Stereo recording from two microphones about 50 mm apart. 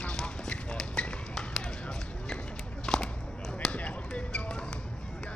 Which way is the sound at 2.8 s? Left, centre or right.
Centre.